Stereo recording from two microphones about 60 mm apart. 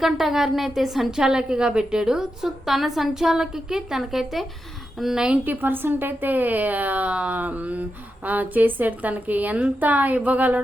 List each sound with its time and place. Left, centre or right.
0.0 s a woman's voice: centre
5.5 s speech: right